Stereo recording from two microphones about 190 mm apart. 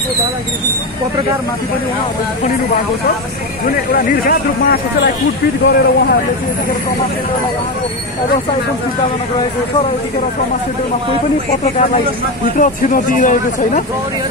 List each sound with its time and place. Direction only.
3.9 s speech: 50° left (ahead or behind)
12.5 s speech: 45° left (ahead or behind)